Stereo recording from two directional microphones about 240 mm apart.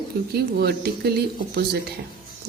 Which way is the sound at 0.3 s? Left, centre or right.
Right.